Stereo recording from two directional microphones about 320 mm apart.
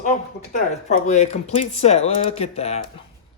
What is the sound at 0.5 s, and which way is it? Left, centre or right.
Speech, left.